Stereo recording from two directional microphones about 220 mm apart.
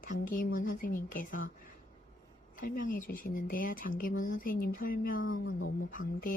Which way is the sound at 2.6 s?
40° left (ahead or behind).